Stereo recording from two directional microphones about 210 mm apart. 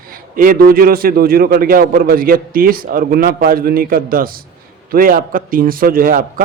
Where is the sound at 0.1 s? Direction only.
40° right (ahead or behind).